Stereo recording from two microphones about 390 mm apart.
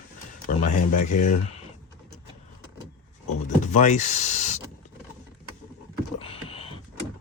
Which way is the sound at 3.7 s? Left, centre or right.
Centre.